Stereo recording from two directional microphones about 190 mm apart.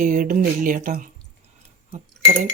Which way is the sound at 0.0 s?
45° right (ahead or behind).